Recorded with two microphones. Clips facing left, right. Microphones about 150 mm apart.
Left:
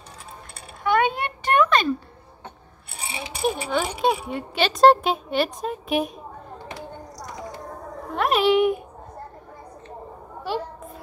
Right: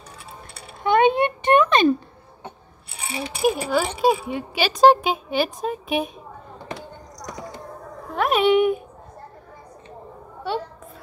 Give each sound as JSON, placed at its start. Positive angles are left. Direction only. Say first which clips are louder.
{"t": 0.8, "sound": "a sound", "louder": "right 4 dB", "side_deg": -20}
{"t": 3.3, "sound": "speech", "louder": "right 3 dB", "side_deg": -5}
{"t": 8.1, "sound": "speech", "louder": "right 1 dB", "side_deg": 0}